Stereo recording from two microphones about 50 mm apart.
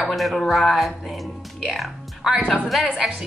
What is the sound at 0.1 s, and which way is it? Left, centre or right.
Speech, centre.